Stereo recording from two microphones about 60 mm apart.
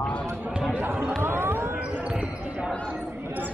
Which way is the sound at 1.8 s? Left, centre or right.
Right.